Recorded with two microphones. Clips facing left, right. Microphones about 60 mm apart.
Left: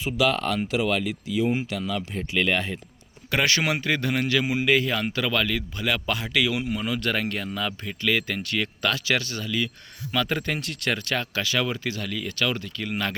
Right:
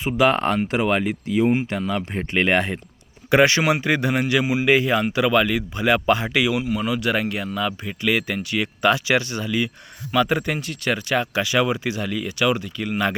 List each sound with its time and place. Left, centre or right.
0.0 s speech: right
2.1 s speech: right
3.2 s speech: right
6.6 s speech: centre